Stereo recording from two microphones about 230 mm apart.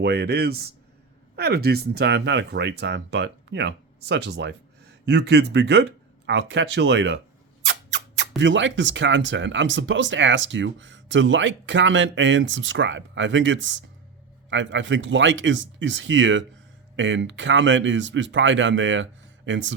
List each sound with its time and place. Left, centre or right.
0.0 s speech: right
7.6 s a sound: right
8.4 s speech: right